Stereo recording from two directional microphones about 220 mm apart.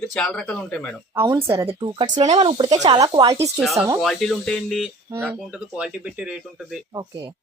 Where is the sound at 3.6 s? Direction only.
Centre (ahead or behind).